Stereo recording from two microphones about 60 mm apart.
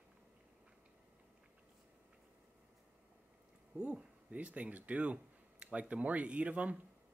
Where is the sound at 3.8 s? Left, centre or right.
Centre.